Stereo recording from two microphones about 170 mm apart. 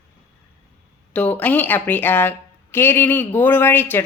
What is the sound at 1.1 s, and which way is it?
A woman's voice, 10° left (ahead or behind).